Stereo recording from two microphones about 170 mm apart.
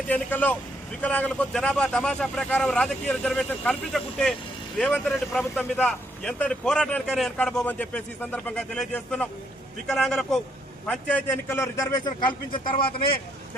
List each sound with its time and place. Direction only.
0.1 s a man's voice: 10° left (ahead or behind); by 13.1 s 30° left (ahead or behind)